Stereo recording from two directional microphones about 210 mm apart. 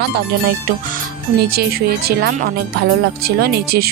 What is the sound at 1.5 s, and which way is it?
Speech, 45° right (ahead or behind).